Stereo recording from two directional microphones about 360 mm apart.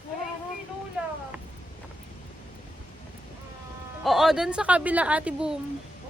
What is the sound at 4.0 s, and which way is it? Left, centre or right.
A woman's voice, centre.